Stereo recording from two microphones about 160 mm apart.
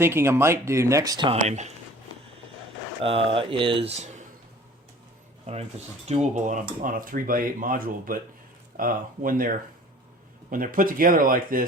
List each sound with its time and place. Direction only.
0.0 s speech: 15° right (ahead or behind)
1.3 s speech: 45° right (ahead or behind)
3.0 s speech: 35° right (ahead or behind)
6.1 s speech: 45° right (ahead or behind)